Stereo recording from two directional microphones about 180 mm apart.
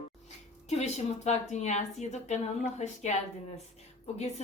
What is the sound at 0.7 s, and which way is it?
A woman's voice, 35° left (ahead or behind).